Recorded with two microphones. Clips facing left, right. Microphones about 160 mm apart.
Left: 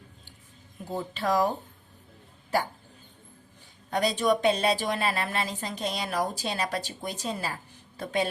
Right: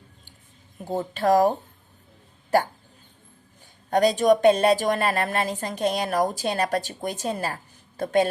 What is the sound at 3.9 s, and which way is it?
A woman's voice, 45° right (ahead or behind).